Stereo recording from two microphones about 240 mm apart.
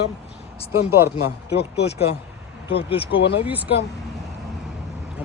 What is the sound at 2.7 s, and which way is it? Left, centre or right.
Speech, left.